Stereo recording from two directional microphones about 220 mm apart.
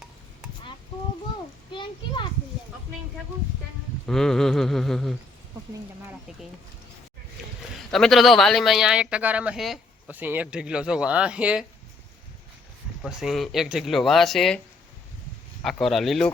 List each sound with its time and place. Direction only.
1.7 s children playing: 20° left (ahead or behind)
4.0 s speech: centre (ahead or behind)
7.8 s speech: centre (ahead or behind)
13.0 s speech: centre (ahead or behind)
15.6 s speech: centre (ahead or behind)